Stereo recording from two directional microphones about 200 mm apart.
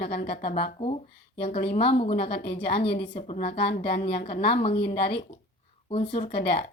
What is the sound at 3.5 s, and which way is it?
Speech, 55° left (ahead or behind).